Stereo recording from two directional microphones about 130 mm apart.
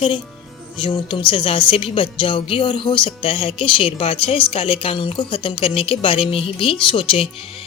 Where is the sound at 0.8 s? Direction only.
40° left (ahead or behind).